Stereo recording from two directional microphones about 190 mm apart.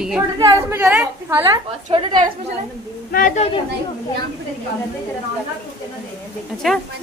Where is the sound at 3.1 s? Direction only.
45° left (ahead or behind).